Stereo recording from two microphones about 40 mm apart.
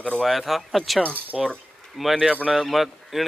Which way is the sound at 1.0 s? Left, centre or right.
Right.